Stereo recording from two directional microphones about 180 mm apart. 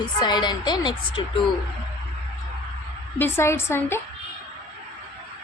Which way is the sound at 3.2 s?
15° left (ahead or behind).